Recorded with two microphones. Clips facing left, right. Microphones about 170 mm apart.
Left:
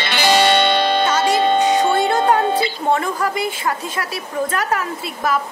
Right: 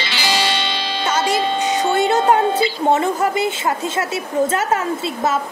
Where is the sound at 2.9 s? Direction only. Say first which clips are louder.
Right 3 dB; 25° right (ahead or behind).